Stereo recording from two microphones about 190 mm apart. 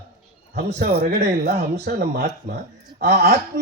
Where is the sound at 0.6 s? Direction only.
40° right (ahead or behind).